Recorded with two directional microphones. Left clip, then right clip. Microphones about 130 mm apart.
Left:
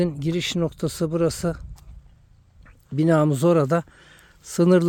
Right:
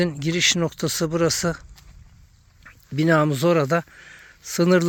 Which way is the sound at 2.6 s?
15° left (ahead or behind).